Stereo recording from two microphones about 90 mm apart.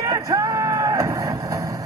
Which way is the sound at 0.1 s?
35° right (ahead or behind).